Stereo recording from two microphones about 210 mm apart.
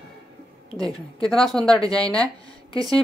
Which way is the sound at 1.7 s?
15° right (ahead or behind).